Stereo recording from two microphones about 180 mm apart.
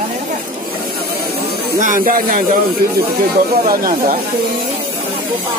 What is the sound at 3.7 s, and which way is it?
Speech, 50° right (ahead or behind).